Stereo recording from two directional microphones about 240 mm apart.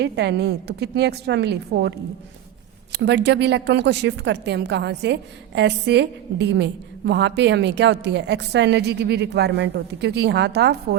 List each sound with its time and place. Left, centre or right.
0.0 s a woman's voice: right
3.0 s a woman's voice: right